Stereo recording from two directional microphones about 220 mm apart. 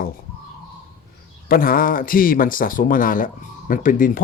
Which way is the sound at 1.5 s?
40° left (ahead or behind).